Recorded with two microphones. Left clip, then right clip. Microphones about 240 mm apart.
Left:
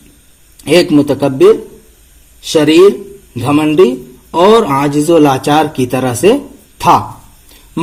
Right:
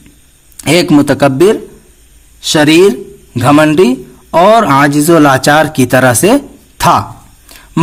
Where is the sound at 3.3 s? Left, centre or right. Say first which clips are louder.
Right 3 dB; right.